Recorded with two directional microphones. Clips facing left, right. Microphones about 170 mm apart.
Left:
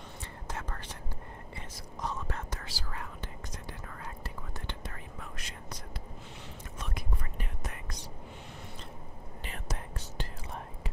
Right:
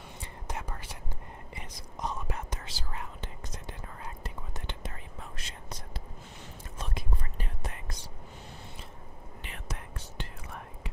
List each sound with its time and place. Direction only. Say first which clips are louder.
0.2 s whispering: right 2 dB; 15° right (ahead or behind)
6.8 s whispering: right 2 dB; 30° right (ahead or behind)
9.4 s whispering: left 2 dB; 35° left (ahead or behind)